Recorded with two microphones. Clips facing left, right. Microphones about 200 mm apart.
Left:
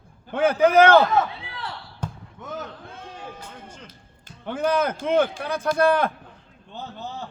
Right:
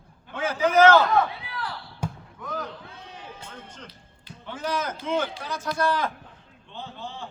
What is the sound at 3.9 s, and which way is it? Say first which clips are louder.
Speech: right 1 dB; 50° left (ahead or behind).